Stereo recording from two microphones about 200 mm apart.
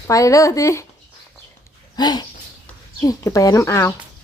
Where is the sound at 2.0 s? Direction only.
20° left (ahead or behind).